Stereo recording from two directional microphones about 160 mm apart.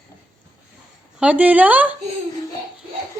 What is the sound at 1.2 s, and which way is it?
Speech, 10° right (ahead or behind).